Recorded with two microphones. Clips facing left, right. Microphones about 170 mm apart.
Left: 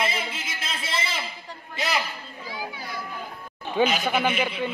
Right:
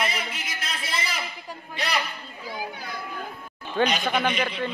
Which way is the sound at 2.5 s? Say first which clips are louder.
Right 1 dB; 50° right (ahead or behind).